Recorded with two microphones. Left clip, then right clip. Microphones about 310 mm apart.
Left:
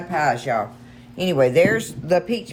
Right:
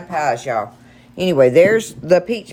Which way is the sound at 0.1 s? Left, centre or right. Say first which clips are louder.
Right 2 dB; centre.